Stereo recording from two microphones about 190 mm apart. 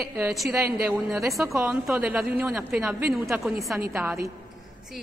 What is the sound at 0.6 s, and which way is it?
A woman's voice, 15° right (ahead or behind).